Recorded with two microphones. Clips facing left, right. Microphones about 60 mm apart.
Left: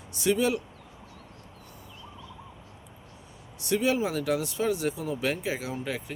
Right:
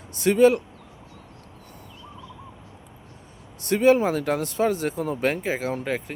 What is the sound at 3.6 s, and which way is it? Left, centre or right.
Speech, right.